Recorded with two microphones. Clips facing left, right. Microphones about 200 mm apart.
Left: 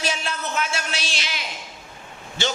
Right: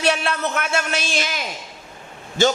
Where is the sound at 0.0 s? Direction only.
65° right (ahead or behind).